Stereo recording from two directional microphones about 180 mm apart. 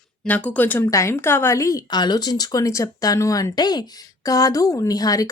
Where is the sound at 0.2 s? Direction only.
10° left (ahead or behind).